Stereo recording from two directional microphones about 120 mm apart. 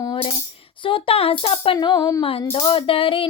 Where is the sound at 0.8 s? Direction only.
50° left (ahead or behind); by 2.2 s 30° left (ahead or behind).